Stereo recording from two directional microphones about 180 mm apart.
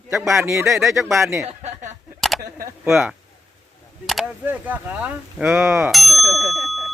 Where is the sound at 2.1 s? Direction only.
Centre (ahead or behind).